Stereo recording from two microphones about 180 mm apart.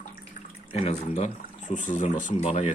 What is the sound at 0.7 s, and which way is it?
Speech, 35° left (ahead or behind).